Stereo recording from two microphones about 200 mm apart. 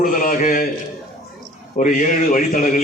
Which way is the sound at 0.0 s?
45° left (ahead or behind).